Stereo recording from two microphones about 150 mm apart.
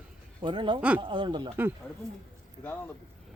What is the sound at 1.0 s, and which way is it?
Speech, 35° right (ahead or behind).